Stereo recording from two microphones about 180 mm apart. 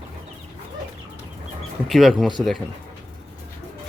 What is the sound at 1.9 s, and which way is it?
Speech, centre (ahead or behind).